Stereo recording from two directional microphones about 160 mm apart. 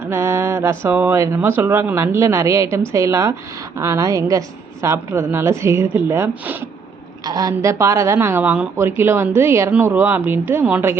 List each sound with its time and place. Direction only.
0.1 s speech: 15° right (ahead or behind)